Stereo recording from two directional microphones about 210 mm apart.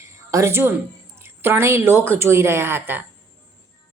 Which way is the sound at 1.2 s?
10° right (ahead or behind).